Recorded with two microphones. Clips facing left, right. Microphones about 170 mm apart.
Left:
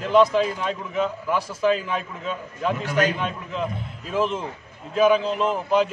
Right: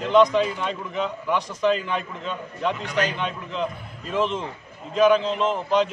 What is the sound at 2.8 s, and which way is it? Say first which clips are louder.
Speech: left 3 dB; 45° left (ahead or behind).